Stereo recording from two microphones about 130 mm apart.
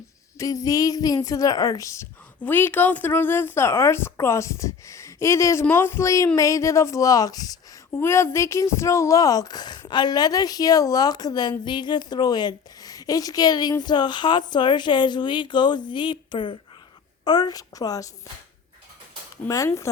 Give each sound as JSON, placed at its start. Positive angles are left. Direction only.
{"t": 0.3, "sound": "speech", "side_deg": 25}
{"t": 19.5, "sound": "speech", "side_deg": 25}